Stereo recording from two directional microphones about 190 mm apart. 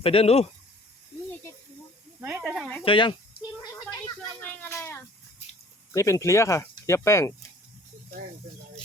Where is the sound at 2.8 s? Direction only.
25° left (ahead or behind).